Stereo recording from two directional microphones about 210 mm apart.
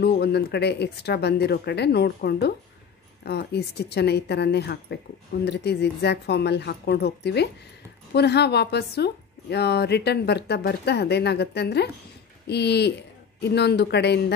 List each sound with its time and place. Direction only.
0.0 s a woman's voice: 50° left (ahead or behind)